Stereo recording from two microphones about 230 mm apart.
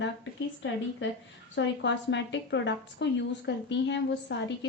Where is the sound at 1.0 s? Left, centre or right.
Left.